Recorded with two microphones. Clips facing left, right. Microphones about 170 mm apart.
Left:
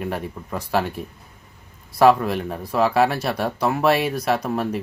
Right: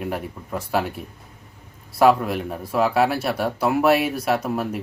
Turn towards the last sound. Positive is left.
turn(degrees=-5)  # may be behind; listen again after turning